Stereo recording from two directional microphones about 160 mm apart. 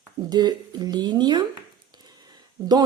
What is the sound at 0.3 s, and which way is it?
Speech, 25° right (ahead or behind).